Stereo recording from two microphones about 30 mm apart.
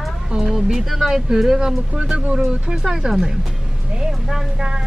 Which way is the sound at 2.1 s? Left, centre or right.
Right.